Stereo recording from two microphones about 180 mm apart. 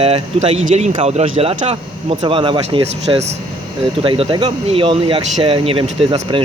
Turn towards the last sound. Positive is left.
turn(degrees=-30)  # may be behind; listen again after turning